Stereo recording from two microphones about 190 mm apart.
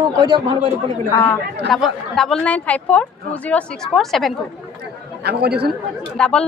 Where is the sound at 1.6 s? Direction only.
Centre (ahead or behind).